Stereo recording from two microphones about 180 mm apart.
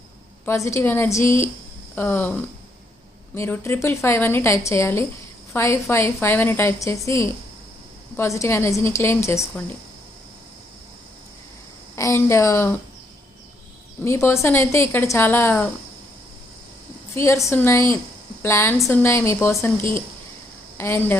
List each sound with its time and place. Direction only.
0.4 s a woman's voice: 15° left (ahead or behind)
11.9 s a woman's voice: 15° left (ahead or behind)
14.0 s a woman's voice: 15° left (ahead or behind)
17.2 s a woman's voice: 15° left (ahead or behind)
20.7 s a woman's voice: 10° left (ahead or behind)